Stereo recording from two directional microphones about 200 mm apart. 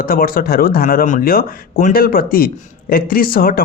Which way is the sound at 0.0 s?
45° left (ahead or behind).